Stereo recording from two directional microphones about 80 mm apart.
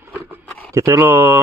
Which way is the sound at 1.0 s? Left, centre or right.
Right.